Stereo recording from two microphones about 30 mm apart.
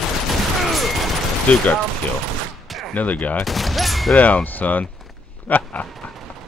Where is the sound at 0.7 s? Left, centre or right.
Centre.